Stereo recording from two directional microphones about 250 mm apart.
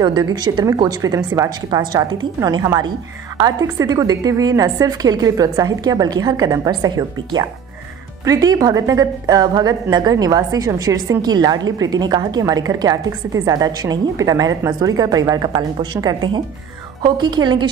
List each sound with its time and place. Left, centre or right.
0.0 s a woman's voice: centre